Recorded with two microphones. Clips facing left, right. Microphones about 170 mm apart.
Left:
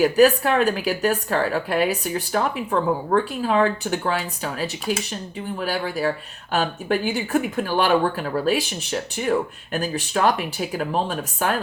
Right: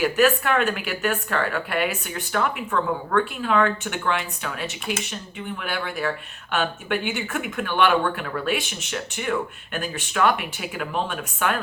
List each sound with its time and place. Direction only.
0.0 s speech: 35° left (ahead or behind)